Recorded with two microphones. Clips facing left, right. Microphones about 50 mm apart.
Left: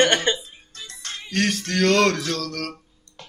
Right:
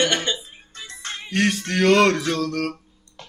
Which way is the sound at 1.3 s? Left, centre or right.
Centre.